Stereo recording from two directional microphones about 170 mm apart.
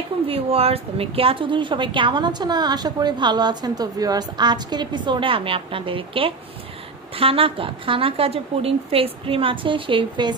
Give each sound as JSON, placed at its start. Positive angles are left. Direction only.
{"t": 0.3, "sound": "a woman's voice", "side_deg": -35}